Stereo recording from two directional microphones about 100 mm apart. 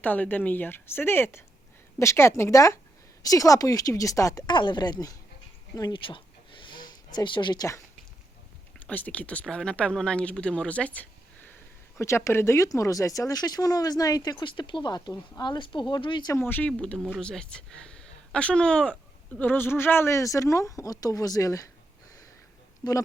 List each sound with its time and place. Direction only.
0.0 s speech: 15° left (ahead or behind); by 4.4 s 35° left (ahead or behind)
4.4 s speech: 50° left (ahead or behind)
5.9 s a sound: 55° left (ahead or behind)
8.8 s speech: 15° left (ahead or behind)
11.9 s speech: 30° left (ahead or behind); by 16.3 s 55° left (ahead or behind)
16.3 s speech: 20° left (ahead or behind); by 21.7 s 35° left (ahead or behind)